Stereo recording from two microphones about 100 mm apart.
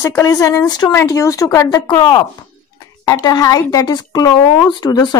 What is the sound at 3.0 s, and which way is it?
A woman's voice, 35° left (ahead or behind).